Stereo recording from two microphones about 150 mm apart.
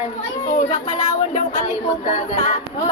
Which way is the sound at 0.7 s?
55° left (ahead or behind).